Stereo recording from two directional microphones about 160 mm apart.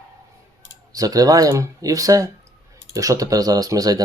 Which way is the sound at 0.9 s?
20° right (ahead or behind).